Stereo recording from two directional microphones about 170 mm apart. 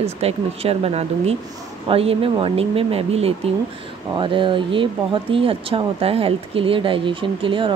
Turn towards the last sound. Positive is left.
turn(degrees=-30)  # may be behind; listen again after turning